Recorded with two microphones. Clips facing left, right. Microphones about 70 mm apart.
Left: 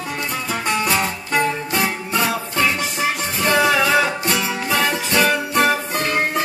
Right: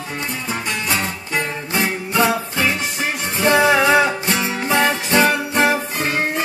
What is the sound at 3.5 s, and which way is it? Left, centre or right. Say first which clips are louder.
Music: right 3 dB; right.